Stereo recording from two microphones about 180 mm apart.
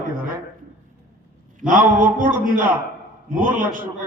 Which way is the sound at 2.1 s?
50° right (ahead or behind).